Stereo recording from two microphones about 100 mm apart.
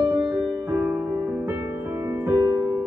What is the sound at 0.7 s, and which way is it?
Music, 20° right (ahead or behind).